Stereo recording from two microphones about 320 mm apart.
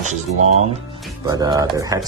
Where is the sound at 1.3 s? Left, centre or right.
Centre.